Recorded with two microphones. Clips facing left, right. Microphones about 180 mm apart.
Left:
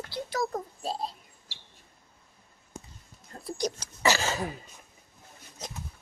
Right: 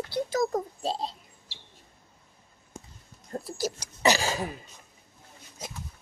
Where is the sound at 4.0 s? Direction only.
15° right (ahead or behind).